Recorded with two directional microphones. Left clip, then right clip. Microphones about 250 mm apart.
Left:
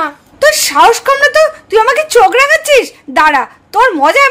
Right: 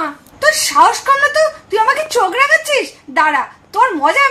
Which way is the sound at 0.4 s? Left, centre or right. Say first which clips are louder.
Left 3 dB; left.